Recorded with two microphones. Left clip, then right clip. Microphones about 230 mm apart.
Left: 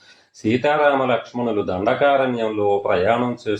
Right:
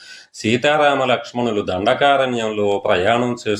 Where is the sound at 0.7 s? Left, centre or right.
Right.